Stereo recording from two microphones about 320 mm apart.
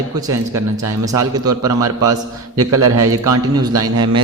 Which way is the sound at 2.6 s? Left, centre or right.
Right.